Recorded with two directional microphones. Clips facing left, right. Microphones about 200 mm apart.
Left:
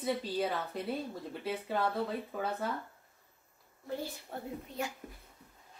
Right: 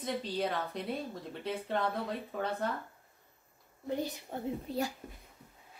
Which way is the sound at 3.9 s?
20° right (ahead or behind).